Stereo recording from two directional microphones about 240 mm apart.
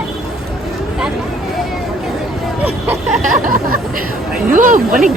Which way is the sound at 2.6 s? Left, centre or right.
Centre.